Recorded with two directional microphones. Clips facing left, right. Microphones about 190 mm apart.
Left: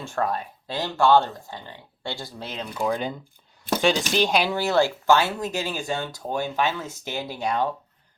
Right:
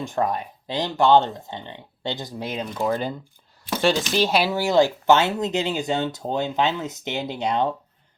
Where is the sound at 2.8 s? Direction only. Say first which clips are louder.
Right 1 dB; centre (ahead or behind).